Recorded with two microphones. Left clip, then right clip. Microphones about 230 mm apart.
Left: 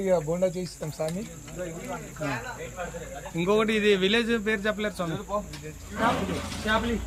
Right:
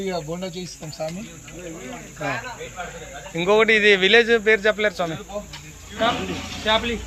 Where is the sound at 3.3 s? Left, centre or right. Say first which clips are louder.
Right 8 dB; centre.